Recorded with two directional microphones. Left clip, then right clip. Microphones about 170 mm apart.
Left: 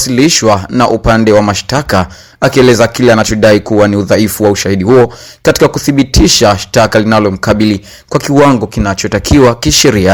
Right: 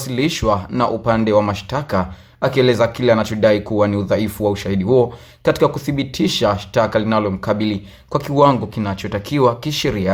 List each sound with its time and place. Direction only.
0.0 s speech: 35° left (ahead or behind)